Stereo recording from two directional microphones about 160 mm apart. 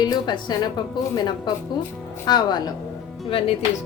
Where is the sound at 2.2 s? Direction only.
25° left (ahead or behind).